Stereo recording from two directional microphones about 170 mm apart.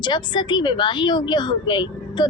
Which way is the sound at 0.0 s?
25° left (ahead or behind).